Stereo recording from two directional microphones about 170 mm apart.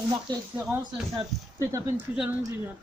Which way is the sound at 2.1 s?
5° right (ahead or behind).